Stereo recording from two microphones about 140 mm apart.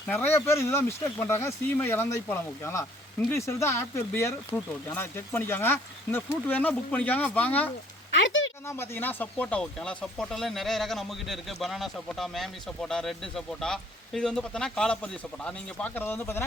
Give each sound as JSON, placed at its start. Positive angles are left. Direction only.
{"t": 0.1, "sound": "speech", "side_deg": 15}
{"t": 3.2, "sound": "speech", "side_deg": 20}